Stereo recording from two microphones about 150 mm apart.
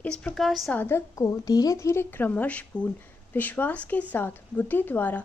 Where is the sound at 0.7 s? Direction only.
15° left (ahead or behind).